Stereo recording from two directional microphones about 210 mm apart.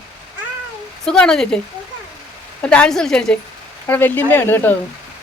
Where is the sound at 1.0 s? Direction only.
5° left (ahead or behind).